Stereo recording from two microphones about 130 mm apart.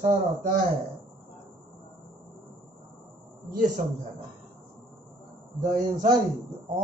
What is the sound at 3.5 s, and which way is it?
Speech, 90° right.